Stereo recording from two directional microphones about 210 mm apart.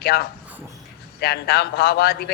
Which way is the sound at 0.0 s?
50° left (ahead or behind).